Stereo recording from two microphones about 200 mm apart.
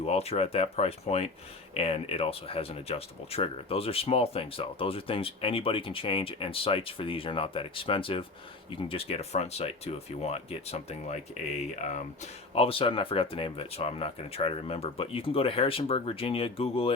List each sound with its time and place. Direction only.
0.0 s speech: 30° left (ahead or behind)